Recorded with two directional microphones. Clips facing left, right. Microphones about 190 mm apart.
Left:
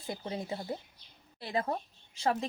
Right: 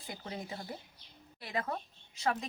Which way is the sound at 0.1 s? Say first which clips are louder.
Left 5 dB; 30° left (ahead or behind).